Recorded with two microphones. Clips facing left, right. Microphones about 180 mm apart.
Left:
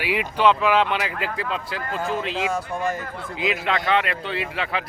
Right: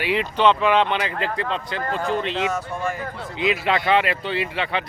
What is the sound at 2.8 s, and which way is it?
Speech, 45° left (ahead or behind).